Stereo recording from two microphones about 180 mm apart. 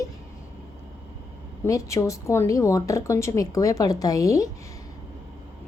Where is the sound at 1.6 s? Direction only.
15° left (ahead or behind).